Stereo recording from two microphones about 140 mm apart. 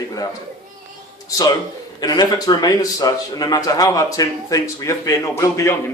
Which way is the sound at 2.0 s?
25° left (ahead or behind).